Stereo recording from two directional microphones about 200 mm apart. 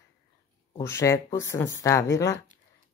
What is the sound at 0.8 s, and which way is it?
Speech, 15° left (ahead or behind).